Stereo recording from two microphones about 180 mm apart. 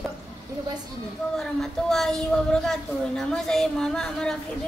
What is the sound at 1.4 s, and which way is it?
A woman's voice, centre (ahead or behind).